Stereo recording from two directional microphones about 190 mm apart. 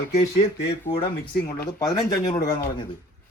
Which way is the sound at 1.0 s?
20° left (ahead or behind).